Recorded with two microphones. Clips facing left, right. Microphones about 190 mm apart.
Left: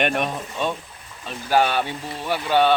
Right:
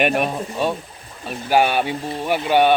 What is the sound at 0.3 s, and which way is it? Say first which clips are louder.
Speech: right 4 dB; 30° right (ahead or behind).